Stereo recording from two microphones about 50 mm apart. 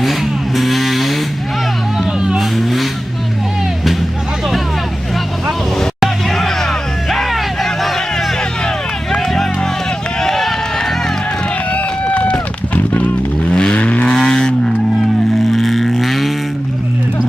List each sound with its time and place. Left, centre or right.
0.0 s vehicle: centre
2.1 s vehicle: centre
2.4 s vehicle: centre
6.0 s music: centre
10.2 s run: centre
11.7 s vehicle: left
15.5 s vehicle: centre